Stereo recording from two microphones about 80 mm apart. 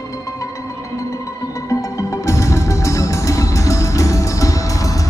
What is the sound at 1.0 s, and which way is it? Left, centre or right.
Music, left.